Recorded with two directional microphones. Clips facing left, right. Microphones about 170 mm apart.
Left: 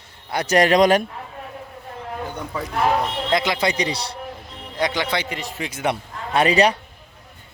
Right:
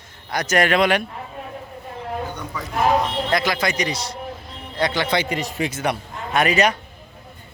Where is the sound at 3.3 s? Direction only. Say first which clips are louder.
Left 3 dB; 25° left (ahead or behind).